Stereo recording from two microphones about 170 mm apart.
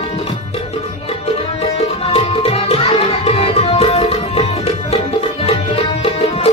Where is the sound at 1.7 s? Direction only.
35° left (ahead or behind).